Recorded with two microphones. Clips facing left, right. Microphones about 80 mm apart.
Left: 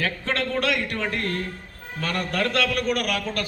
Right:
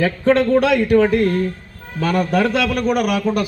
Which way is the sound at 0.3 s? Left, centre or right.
Centre.